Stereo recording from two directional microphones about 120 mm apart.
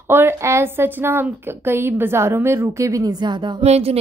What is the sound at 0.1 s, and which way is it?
Speech, 20° right (ahead or behind).